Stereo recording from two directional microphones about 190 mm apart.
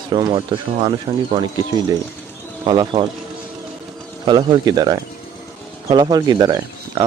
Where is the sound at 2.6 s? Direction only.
25° right (ahead or behind).